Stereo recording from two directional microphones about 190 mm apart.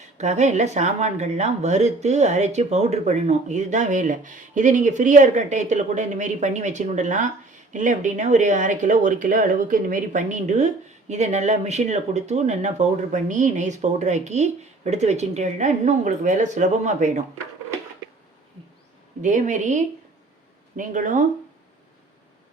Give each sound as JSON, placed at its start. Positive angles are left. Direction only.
{"t": 0.2, "sound": "speech", "side_deg": -40}
{"t": 19.2, "sound": "speech", "side_deg": -40}